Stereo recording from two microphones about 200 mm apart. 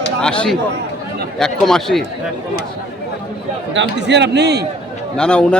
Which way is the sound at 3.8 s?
60° right (ahead or behind).